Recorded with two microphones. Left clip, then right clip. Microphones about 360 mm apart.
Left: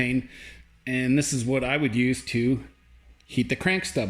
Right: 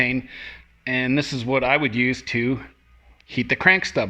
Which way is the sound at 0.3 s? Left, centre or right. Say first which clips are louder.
Right 8 dB; centre.